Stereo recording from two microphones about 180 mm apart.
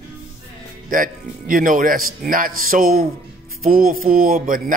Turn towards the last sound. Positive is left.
turn(degrees=-50)  # may be behind; listen again after turning